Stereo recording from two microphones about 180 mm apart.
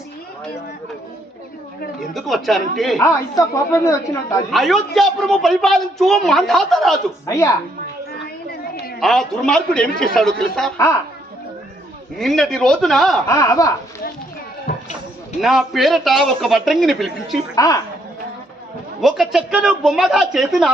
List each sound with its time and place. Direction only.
2.1 s a woman's voice: centre (ahead or behind)
3.0 s a woman's voice: 15° left (ahead or behind)
4.5 s a woman's voice: centre (ahead or behind)
7.3 s a woman's voice: 15° left (ahead or behind)
9.0 s a woman's voice: centre (ahead or behind)
12.1 s a woman's voice: centre (ahead or behind)
13.2 s a woman's voice: 15° left (ahead or behind)
14.7 s a sound: 40° left (ahead or behind)
15.4 s a woman's voice: centre (ahead or behind)
17.5 s a woman's voice: 20° left (ahead or behind)
19.0 s a woman's voice: centre (ahead or behind)